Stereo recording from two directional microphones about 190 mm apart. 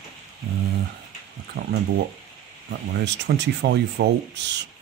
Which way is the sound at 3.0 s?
65° right (ahead or behind).